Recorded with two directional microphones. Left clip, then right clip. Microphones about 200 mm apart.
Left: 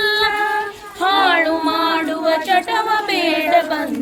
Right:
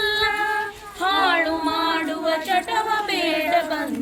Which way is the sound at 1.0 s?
5° right (ahead or behind).